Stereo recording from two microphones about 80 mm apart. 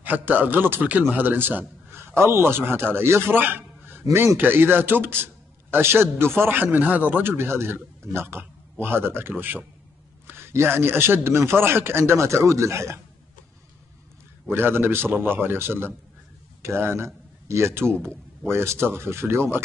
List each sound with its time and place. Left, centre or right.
0.0 s a man's voice: right
14.5 s a man's voice: right